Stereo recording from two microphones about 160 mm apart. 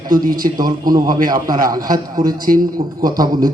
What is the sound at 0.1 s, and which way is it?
Speech, 60° right (ahead or behind).